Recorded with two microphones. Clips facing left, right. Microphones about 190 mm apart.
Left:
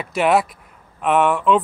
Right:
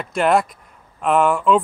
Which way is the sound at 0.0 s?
Centre (ahead or behind).